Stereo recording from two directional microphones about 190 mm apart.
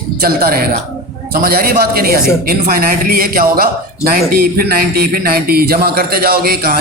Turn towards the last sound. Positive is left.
turn(degrees=-55)  # may be behind; listen again after turning